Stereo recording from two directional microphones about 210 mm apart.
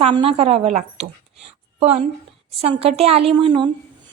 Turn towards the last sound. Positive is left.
turn(degrees=-25)  # may be behind; listen again after turning